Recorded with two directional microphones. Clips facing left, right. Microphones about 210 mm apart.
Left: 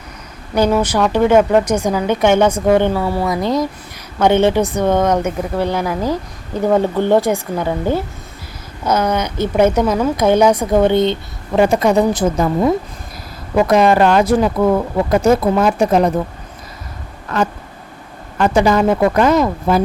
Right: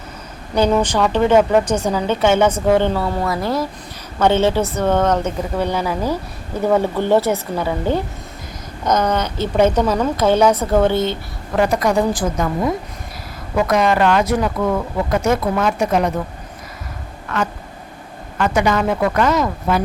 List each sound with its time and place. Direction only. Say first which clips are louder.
0.5 s a woman's voice: left 1 dB; 10° left (ahead or behind); by 16.1 s 30° left (ahead or behind)
17.3 s speech: left 4 dB; 35° left (ahead or behind)